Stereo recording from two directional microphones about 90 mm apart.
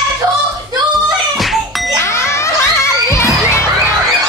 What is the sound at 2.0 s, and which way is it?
Music, 30° left (ahead or behind).